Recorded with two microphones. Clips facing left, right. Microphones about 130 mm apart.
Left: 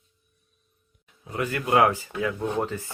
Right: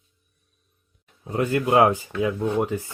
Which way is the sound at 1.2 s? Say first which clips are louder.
Right 6 dB; 30° right (ahead or behind).